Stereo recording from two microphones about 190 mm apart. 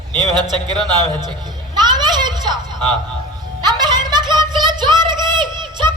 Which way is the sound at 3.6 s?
20° right (ahead or behind).